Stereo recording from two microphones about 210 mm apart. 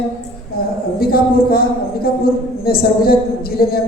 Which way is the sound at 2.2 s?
45° left (ahead or behind).